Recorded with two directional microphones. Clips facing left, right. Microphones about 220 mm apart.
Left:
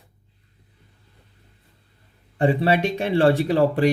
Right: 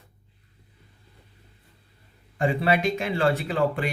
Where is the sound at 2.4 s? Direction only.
30° left (ahead or behind).